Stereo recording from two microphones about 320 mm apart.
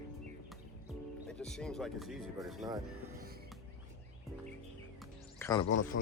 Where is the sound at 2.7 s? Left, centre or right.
Centre.